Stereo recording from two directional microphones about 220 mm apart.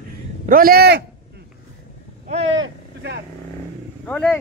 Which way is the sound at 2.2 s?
30° right (ahead or behind).